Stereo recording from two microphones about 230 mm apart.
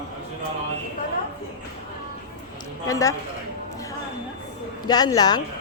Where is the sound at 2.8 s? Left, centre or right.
Centre.